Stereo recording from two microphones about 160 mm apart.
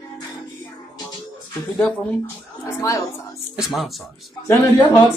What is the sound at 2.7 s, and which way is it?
Speech, 20° left (ahead or behind).